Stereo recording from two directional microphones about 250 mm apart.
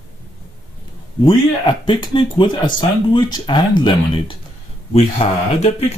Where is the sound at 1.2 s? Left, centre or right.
Centre.